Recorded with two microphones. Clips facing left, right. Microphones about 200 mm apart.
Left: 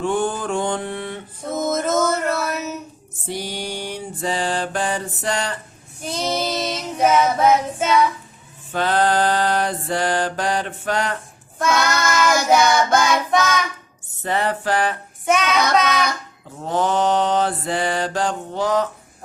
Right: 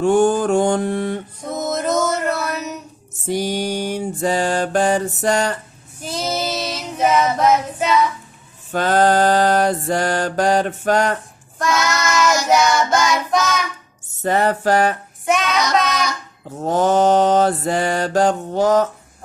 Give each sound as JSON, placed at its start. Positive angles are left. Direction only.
{"t": 0.0, "sound": "mantra", "side_deg": -45}
{"t": 1.5, "sound": "a sound", "side_deg": 0}
{"t": 3.2, "sound": "mantra", "side_deg": -45}
{"t": 6.0, "sound": "child singing", "side_deg": 0}
{"t": 8.7, "sound": "mantra", "side_deg": -45}
{"t": 11.6, "sound": "child singing", "side_deg": 0}
{"t": 14.2, "sound": "mantra", "side_deg": -45}
{"t": 15.3, "sound": "child singing", "side_deg": 0}
{"t": 16.6, "sound": "mantra", "side_deg": -45}